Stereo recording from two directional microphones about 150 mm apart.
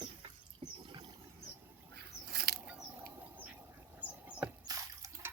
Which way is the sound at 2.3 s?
90° right.